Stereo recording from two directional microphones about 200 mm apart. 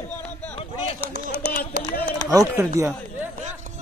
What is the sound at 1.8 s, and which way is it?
Run, 40° right (ahead or behind).